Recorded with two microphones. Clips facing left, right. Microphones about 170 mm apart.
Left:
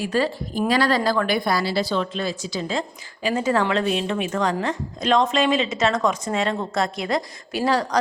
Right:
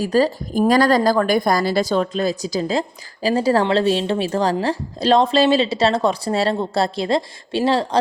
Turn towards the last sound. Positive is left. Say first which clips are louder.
# right 3 dB
turn(degrees=-25)  # may be behind; listen again after turning